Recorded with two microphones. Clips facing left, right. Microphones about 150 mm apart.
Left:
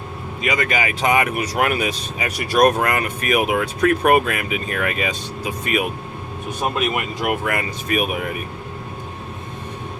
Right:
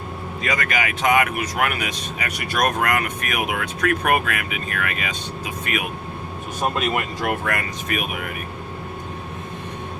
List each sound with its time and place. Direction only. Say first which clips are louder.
0.4 s speech: left 3 dB; 20° left (ahead or behind)
6.7 s speech: left 1 dB; 10° left (ahead or behind)